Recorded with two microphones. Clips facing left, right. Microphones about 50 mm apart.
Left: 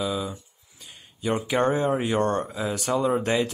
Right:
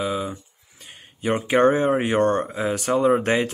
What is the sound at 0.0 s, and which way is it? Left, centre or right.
Speech, right.